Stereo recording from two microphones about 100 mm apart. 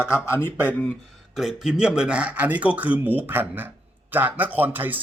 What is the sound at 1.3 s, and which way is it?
A man's voice, 5° right (ahead or behind).